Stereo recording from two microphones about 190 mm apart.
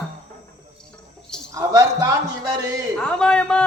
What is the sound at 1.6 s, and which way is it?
Speech, 20° right (ahead or behind).